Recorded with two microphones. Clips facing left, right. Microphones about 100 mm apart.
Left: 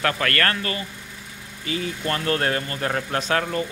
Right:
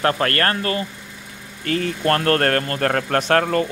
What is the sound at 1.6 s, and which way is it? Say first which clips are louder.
Speech: right 7 dB; 55° right (ahead or behind).